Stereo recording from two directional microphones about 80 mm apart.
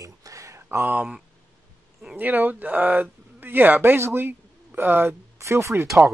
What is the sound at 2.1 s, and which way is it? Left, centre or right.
Speech, right.